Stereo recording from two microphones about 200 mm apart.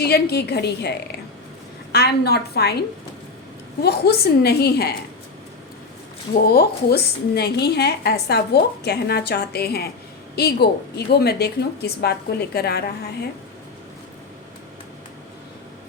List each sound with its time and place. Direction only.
0.0 s a woman's voice: 55° left (ahead or behind)
3.8 s a woman's voice: 50° left (ahead or behind)
6.5 s a woman's voice: 50° left (ahead or behind)